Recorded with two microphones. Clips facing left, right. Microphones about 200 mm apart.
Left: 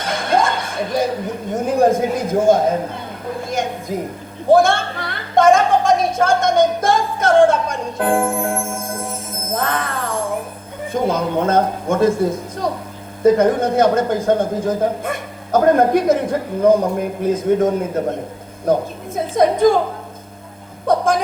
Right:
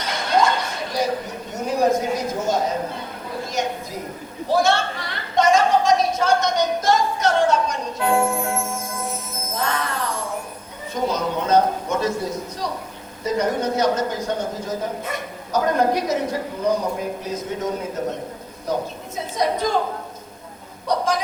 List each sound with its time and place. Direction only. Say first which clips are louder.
0.0 s music: left 2 dB; 50° left (ahead or behind)
1.5 s a man's voice: left 4 dB; 50° left (ahead or behind)
4.4 s a sound: left 6 dB; 50° left (ahead or behind)
10.9 s a man's voice: left 5 dB; 50° left (ahead or behind)
20.8 s speech: left 5 dB; 50° left (ahead or behind)